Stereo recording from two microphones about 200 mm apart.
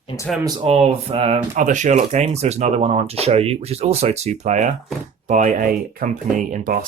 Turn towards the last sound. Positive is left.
turn(degrees=-40)  # may be behind; listen again after turning